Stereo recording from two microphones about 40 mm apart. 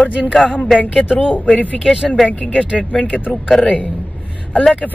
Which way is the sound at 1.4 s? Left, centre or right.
Left.